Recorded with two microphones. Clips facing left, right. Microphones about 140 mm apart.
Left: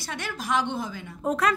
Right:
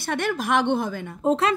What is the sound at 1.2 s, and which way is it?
Speech, 25° right (ahead or behind).